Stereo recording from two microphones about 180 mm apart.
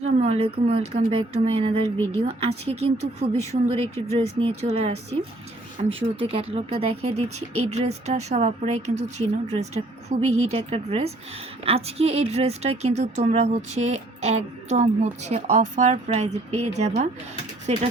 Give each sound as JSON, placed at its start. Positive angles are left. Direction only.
{"t": 0.0, "sound": "a woman's voice", "side_deg": -35}